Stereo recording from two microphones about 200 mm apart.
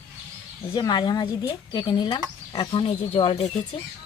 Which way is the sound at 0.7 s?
20° left (ahead or behind).